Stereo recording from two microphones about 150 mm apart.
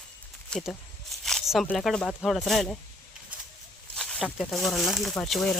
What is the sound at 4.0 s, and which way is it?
Speech, 5° left (ahead or behind).